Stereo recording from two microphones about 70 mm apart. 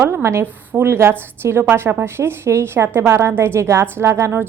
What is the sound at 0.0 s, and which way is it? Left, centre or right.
A woman's voice, right.